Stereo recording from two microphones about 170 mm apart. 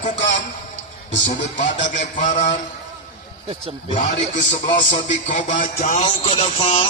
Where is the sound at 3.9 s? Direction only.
45° left (ahead or behind).